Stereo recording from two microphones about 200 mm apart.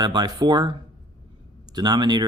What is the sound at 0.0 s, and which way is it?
Speech, 20° right (ahead or behind).